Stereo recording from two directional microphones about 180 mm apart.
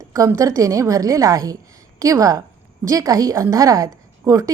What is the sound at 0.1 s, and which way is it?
A woman's voice, 15° right (ahead or behind).